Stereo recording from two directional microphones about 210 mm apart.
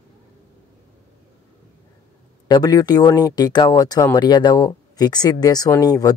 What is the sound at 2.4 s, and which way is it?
Speech, 20° left (ahead or behind).